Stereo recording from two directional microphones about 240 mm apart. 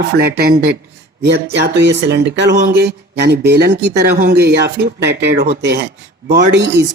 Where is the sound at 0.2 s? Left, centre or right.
Right.